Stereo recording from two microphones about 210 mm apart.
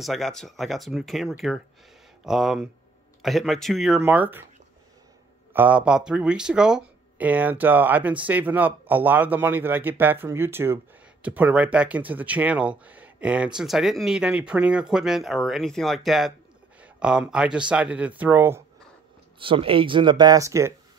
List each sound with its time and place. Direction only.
0.0 s speech: centre (ahead or behind)
5.5 s speech: 10° right (ahead or behind)
19.4 s speech: 25° right (ahead or behind)